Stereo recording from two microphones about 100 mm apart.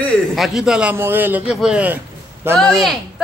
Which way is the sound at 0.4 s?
5° right (ahead or behind).